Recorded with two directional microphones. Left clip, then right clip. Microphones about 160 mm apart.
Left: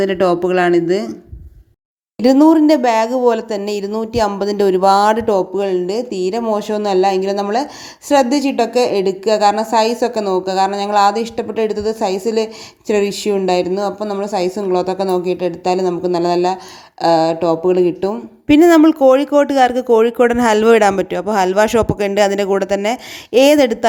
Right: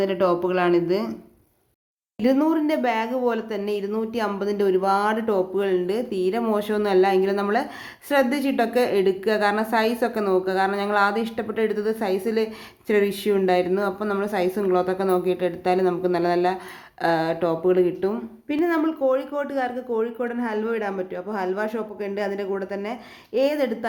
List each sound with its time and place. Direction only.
0.0 s speech: 35° left (ahead or behind)
2.2 s a woman's voice: 45° left (ahead or behind)
18.4 s speech: 75° left (ahead or behind)